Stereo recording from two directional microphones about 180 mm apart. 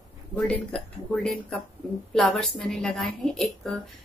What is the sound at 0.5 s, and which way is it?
A woman's voice, 5° left (ahead or behind).